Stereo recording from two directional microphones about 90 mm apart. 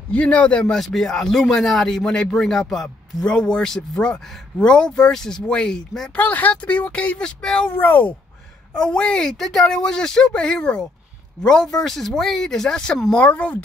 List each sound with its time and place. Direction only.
0.1 s a man's voice: 15° left (ahead or behind)
6.1 s a man's voice: 20° left (ahead or behind)